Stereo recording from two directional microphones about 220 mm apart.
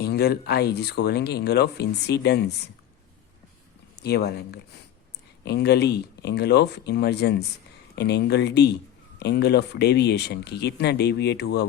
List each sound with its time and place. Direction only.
0.0 s speech: 45° left (ahead or behind)
4.0 s speech: 45° left (ahead or behind)